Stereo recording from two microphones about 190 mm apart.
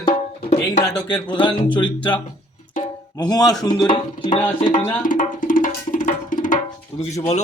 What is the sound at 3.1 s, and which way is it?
Speech, 20° left (ahead or behind).